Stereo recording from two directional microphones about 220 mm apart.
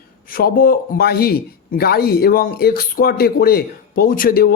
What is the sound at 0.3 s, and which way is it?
A man's voice, 40° left (ahead or behind).